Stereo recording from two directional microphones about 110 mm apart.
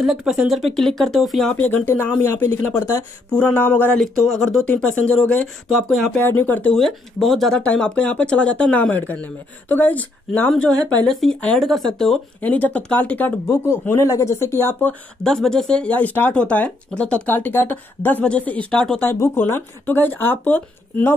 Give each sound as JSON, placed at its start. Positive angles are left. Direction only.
{"t": 0.0, "sound": "speech", "side_deg": -5}
{"t": 1.5, "sound": "speech", "side_deg": 10}
{"t": 3.3, "sound": "speech", "side_deg": 10}
{"t": 6.1, "sound": "speech", "side_deg": 15}
{"t": 6.7, "sound": "speech", "side_deg": 5}
{"t": 12.4, "sound": "speech", "side_deg": 15}
{"t": 15.2, "sound": "speech", "side_deg": 5}
{"t": 18.9, "sound": "speech", "side_deg": 25}